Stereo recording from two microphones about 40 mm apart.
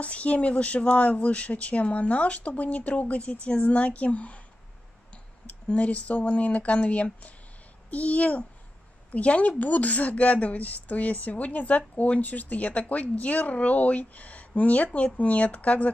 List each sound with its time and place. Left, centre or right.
0.0 s a woman's voice: left